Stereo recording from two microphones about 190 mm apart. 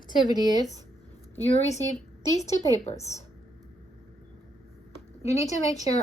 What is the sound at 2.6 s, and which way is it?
Speech, 35° left (ahead or behind).